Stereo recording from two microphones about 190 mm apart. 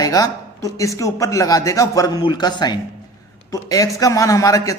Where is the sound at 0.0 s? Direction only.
20° left (ahead or behind).